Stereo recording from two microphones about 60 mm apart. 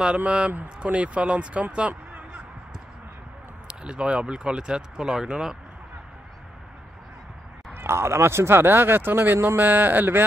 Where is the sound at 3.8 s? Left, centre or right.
Centre.